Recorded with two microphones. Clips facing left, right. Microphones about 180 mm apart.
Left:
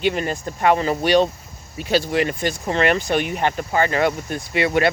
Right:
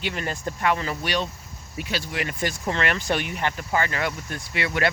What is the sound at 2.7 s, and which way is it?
Speech, 20° left (ahead or behind).